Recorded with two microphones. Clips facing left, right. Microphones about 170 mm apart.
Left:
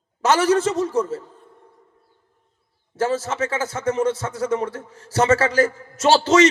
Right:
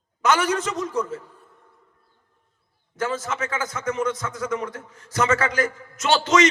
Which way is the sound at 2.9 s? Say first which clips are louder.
Left 5 dB; 30° left (ahead or behind).